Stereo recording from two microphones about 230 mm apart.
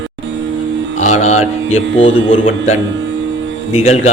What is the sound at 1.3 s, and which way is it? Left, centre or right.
Music, left.